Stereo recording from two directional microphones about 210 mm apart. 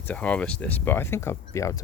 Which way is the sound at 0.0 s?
5° left (ahead or behind).